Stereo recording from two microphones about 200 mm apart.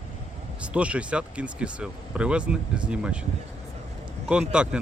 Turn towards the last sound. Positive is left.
turn(degrees=-5)  # may be behind; listen again after turning